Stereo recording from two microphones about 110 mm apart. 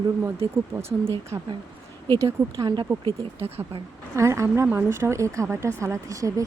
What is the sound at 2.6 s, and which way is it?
Speech, 40° right (ahead or behind).